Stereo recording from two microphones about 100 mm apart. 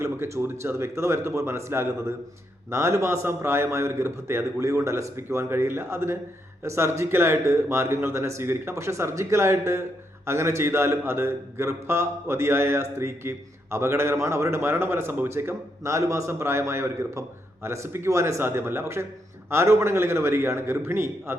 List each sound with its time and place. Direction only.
0.0 s a man's voice: 25° right (ahead or behind)